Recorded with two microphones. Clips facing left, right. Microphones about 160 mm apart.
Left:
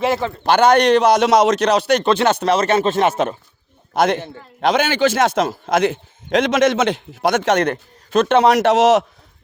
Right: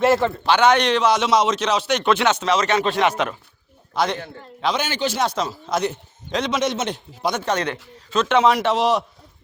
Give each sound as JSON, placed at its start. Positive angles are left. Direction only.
{"t": 0.0, "sound": "a man's voice", "side_deg": 0}
{"t": 0.4, "sound": "a man's voice", "side_deg": 45}
{"t": 2.3, "sound": "a man's voice", "side_deg": 55}
{"t": 5.7, "sound": "a man's voice", "side_deg": 90}
{"t": 7.6, "sound": "speech", "side_deg": 55}
{"t": 8.4, "sound": "a man's voice", "side_deg": 70}